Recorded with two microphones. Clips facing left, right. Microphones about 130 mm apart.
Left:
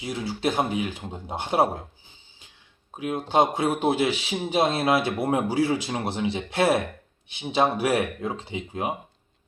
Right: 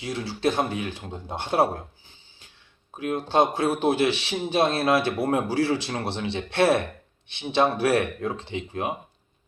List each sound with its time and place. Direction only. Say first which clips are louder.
0.0 s speech: right 1 dB; 15° left (ahead or behind)